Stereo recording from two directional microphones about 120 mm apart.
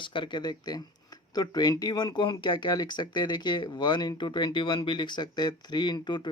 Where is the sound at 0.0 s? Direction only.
40° left (ahead or behind).